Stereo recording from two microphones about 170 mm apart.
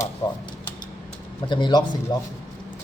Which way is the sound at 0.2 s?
30° left (ahead or behind).